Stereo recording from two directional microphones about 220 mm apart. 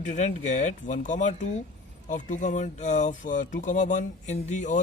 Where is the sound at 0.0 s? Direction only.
35° left (ahead or behind).